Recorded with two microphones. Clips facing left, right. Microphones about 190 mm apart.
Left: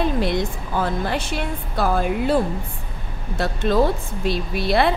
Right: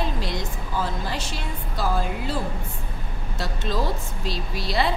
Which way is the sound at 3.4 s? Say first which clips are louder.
Left 8 dB; 55° left (ahead or behind).